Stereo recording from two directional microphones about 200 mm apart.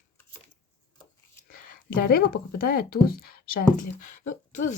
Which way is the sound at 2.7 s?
50° left (ahead or behind).